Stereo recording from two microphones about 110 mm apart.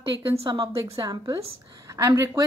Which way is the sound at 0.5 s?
40° right (ahead or behind).